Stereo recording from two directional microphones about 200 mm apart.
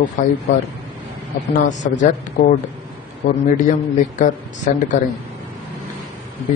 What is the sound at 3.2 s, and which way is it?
Speech, 40° left (ahead or behind).